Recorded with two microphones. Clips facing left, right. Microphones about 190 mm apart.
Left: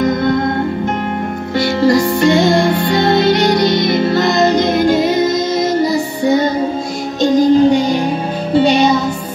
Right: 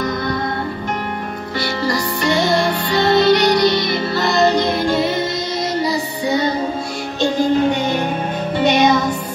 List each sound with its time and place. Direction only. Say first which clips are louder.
1.8 s music: left 11 dB; 50° left (ahead or behind); by 9.0 s 30° left (ahead or behind)